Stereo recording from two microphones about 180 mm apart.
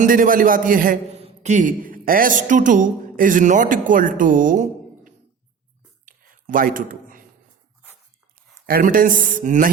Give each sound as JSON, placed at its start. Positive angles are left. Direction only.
{"t": 0.0, "sound": "speech", "side_deg": -50}
{"t": 1.1, "sound": "a woman's voice", "side_deg": -40}
{"t": 6.1, "sound": "a sound", "side_deg": -50}
{"t": 8.6, "sound": "speech", "side_deg": -55}